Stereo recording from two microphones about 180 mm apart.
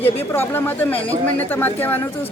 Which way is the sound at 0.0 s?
10° left (ahead or behind).